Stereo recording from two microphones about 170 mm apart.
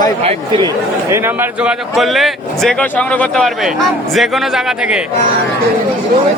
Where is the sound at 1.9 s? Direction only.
Centre (ahead or behind).